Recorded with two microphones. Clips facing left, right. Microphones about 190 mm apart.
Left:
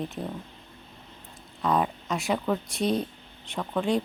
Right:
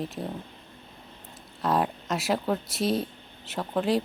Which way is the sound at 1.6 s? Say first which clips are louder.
Even; centre (ahead or behind).